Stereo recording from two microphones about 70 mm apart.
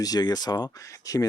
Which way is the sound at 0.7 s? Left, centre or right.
Left.